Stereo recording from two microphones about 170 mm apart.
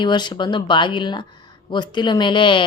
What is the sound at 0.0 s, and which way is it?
Speech, 25° left (ahead or behind).